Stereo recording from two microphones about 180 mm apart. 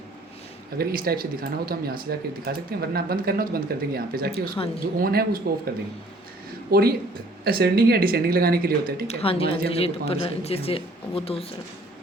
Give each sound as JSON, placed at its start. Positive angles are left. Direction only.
{"t": 0.8, "sound": "speech", "side_deg": -55}
{"t": 9.0, "sound": "speech", "side_deg": 35}